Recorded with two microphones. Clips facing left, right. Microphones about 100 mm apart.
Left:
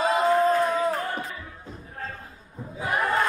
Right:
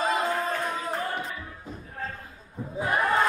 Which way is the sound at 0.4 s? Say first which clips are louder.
Left 8 dB; 35° left (ahead or behind).